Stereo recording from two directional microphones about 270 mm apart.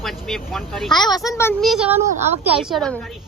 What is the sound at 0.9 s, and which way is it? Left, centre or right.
A child's voice, centre.